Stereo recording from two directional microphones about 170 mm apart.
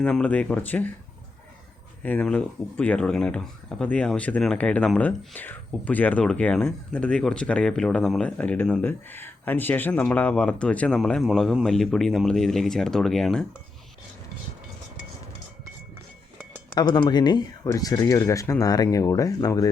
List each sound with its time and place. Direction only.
0.0 s speech: 5° left (ahead or behind)
2.0 s speech: 5° left (ahead or behind)
16.7 s speech: 25° left (ahead or behind)